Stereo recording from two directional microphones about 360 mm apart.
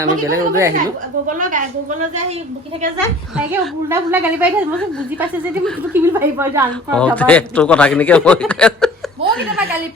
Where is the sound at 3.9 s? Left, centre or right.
Centre.